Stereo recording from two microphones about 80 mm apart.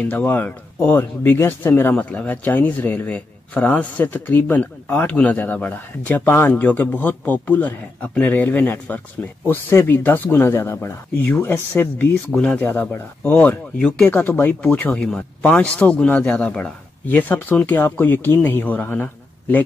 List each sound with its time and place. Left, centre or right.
0.0 s speech: centre
15.0 s speech: centre